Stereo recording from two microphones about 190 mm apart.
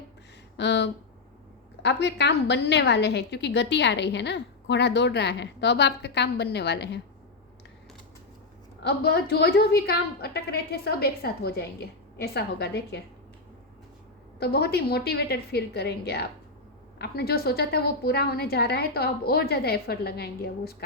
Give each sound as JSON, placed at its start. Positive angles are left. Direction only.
{"t": 0.5, "sound": "a woman's voice", "side_deg": 65}
{"t": 8.8, "sound": "a woman's voice", "side_deg": 60}
{"t": 14.3, "sound": "a woman's voice", "side_deg": 55}